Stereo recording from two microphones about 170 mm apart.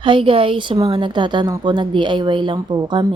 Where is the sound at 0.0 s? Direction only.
30° right (ahead or behind).